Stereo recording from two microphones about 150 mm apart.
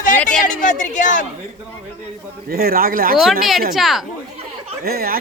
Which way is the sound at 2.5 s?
80° right.